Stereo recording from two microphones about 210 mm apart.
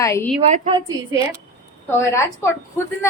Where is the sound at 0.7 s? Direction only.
20° right (ahead or behind).